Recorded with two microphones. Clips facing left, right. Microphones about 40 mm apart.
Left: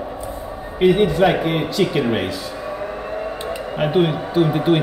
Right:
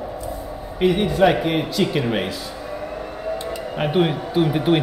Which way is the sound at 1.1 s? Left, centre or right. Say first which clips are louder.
Even; centre.